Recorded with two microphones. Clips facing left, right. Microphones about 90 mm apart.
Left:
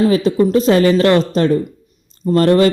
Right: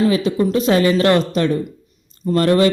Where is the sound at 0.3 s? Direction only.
30° left (ahead or behind).